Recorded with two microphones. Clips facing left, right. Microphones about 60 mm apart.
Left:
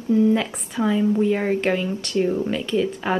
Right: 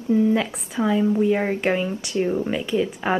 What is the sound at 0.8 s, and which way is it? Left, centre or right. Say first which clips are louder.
Speech: even; centre.